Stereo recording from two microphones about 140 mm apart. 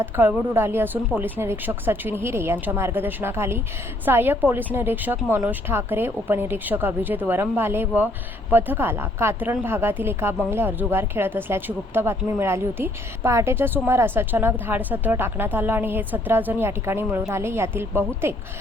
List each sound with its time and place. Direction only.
0.0 s a woman's voice: 15° right (ahead or behind)